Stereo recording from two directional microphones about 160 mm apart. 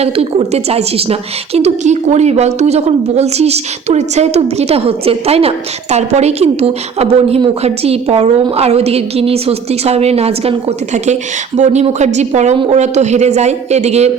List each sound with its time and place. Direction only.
0.0 s a woman's voice: 40° right (ahead or behind)